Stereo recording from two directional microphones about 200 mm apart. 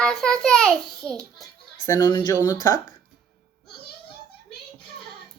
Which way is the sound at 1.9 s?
20° left (ahead or behind).